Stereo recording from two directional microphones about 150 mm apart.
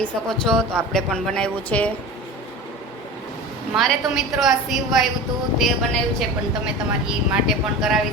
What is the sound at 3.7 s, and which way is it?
Speech, centre (ahead or behind).